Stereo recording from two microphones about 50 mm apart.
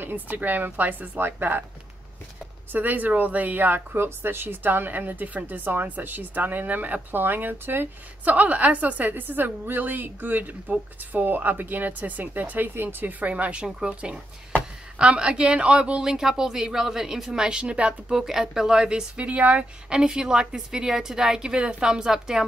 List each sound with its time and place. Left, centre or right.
0.0 s speech: right
2.7 s speech: right
8.3 s a woman's voice: right
18.2 s speech: centre